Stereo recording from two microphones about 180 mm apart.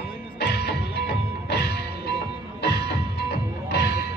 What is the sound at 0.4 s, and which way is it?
Music, 65° left (ahead or behind).